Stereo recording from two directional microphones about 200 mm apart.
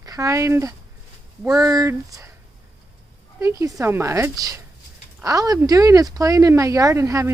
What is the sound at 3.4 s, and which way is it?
Speech, 15° right (ahead or behind).